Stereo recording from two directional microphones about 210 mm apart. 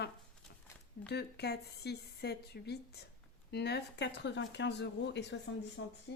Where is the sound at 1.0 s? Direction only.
50° left (ahead or behind).